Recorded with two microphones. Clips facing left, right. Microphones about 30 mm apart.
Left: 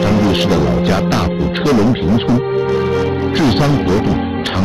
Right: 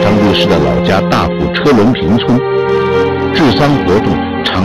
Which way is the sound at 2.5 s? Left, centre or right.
Right.